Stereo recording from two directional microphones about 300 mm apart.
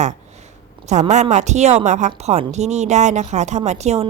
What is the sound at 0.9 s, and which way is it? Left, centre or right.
A woman's voice, right.